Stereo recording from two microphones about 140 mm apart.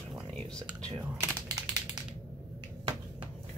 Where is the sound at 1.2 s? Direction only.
20° right (ahead or behind).